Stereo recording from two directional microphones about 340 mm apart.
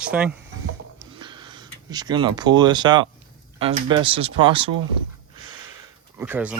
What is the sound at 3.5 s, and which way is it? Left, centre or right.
Speech, centre.